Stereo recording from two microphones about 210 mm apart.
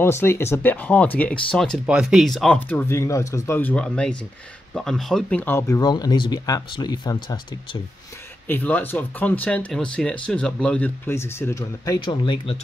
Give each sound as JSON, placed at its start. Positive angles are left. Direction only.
{"t": 0.0, "sound": "speech", "side_deg": 10}
{"t": 8.5, "sound": "speech", "side_deg": 10}